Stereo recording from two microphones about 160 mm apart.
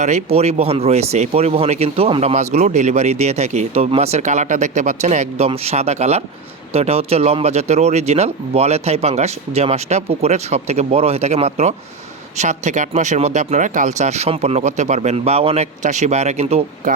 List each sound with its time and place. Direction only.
0.0 s speech: 45° right (ahead or behind)